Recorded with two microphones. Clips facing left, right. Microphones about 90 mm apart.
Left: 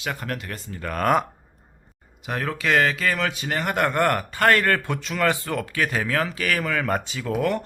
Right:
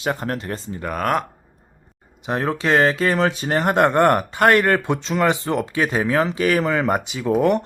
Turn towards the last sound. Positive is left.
turn(degrees=-20)  # may be behind; listen again after turning